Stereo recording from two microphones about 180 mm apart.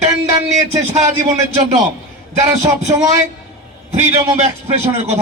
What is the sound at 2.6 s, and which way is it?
Speech, 20° right (ahead or behind).